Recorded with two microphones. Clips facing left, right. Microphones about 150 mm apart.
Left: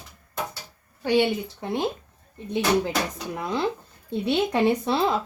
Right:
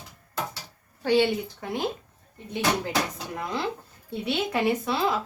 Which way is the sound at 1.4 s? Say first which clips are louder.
Left 3 dB; 25° left (ahead or behind).